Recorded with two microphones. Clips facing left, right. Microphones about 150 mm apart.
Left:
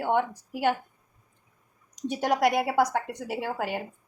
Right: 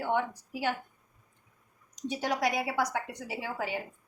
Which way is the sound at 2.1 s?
55° left (ahead or behind).